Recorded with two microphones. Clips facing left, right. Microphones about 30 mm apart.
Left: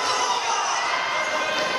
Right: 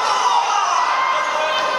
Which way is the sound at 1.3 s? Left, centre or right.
Right.